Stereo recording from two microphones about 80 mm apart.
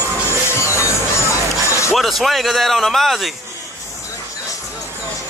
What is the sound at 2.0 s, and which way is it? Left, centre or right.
A man's voice, centre.